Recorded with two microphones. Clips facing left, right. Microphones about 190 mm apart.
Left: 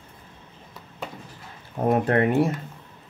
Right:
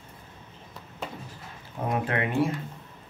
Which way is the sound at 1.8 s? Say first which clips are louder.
Left 7 dB; 45° left (ahead or behind).